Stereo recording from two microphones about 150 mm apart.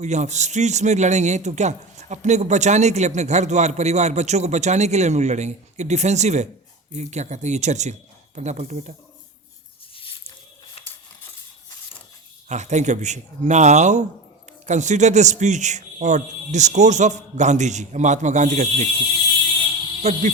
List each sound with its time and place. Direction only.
0.0 s a man's voice: 50° right (ahead or behind)
9.9 s a sound: 35° left (ahead or behind)
12.5 s a man's voice: 50° right (ahead or behind)
20.0 s a man's voice: 50° right (ahead or behind)